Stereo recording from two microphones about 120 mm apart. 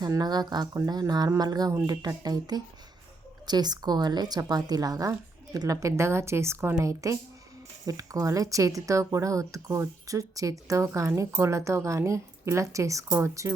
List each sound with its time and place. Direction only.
0.0 s a woman's voice: 35° right (ahead or behind)